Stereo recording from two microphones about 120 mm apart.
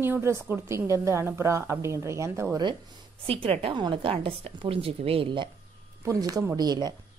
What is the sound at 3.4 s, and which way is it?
A woman's voice, 50° right (ahead or behind).